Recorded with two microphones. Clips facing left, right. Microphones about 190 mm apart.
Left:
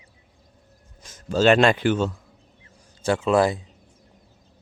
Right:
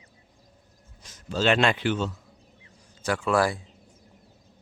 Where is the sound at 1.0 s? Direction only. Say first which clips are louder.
Left 6 dB; 45° left (ahead or behind).